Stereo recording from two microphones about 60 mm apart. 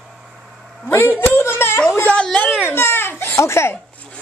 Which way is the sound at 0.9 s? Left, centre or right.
Left.